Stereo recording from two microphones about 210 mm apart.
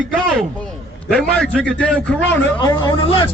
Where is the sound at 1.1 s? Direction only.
5° left (ahead or behind).